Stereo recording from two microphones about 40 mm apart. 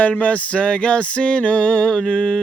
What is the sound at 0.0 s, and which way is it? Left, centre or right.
Music, left.